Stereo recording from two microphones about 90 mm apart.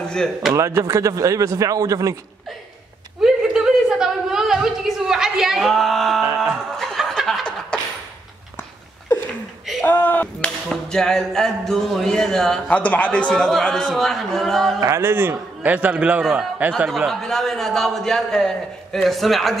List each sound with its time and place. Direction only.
0.0 s speech: 5° left (ahead or behind)
0.6 s speech: 30° right (ahead or behind)
3.2 s a sound: 5° right (ahead or behind)
6.5 s chuckle: 5° left (ahead or behind)
7.7 s a sound: 10° left (ahead or behind)
9.8 s speech: 20° left (ahead or behind)
10.7 s a man's voice: 5° left (ahead or behind)
12.6 s a man's voice: 15° left (ahead or behind)
13.3 s a man's voice: 5° left (ahead or behind)
14.8 s a man's voice: 30° right (ahead or behind); by 19.5 s centre (ahead or behind)